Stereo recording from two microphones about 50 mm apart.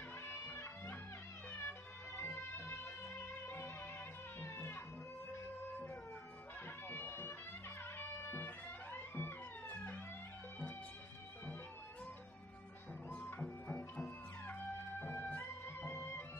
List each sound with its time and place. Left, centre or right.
0.5 s music: left
7.1 s music: left
8.9 s music: left
13.1 s music: left
15.3 s music: left